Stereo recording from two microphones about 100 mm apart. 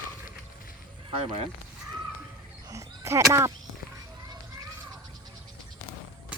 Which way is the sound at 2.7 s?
30° right (ahead or behind).